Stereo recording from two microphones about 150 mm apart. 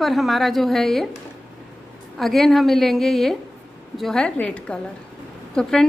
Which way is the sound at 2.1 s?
Centre (ahead or behind).